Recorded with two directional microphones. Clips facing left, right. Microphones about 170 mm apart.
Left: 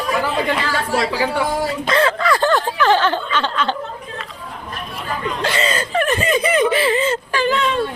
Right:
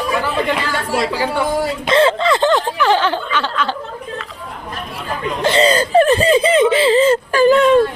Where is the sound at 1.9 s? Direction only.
25° right (ahead or behind); by 3.6 s 10° right (ahead or behind).